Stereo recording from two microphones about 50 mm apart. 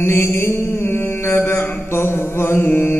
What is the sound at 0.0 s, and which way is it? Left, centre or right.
Mantra, left.